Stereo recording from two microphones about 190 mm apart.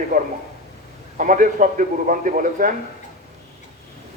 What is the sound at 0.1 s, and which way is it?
A man's voice, 45° right (ahead or behind).